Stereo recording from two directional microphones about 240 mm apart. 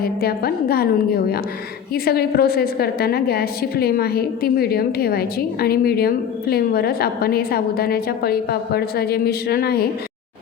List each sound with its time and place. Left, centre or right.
0.0 s a woman's voice: left